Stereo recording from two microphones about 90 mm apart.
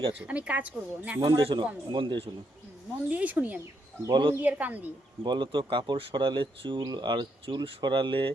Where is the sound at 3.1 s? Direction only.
15° right (ahead or behind).